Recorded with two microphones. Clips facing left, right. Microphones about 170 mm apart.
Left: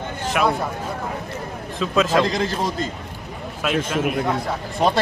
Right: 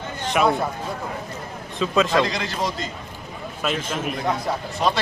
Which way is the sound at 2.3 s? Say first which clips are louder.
Left 6 dB; 40° left (ahead or behind).